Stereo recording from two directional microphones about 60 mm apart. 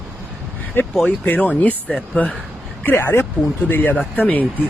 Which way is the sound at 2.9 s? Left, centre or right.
Left.